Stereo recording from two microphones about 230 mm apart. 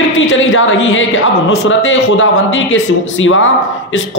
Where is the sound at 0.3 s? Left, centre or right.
Left.